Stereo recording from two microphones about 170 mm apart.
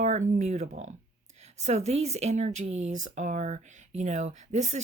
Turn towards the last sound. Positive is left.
turn(degrees=-45)  # may be behind; listen again after turning